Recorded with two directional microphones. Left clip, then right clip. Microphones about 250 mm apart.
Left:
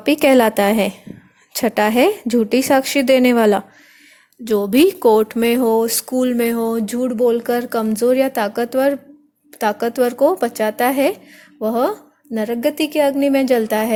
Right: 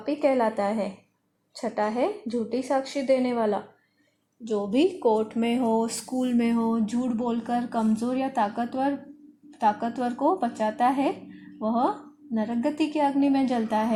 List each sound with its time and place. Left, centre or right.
0.0 s speech: left